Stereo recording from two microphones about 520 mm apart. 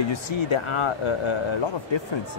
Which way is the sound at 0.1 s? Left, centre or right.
Left.